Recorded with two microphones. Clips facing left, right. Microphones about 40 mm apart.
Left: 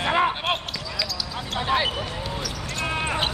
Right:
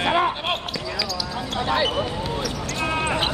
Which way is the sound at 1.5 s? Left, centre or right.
Centre.